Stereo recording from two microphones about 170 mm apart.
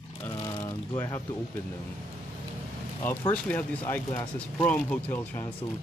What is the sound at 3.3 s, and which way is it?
Speech, 10° left (ahead or behind).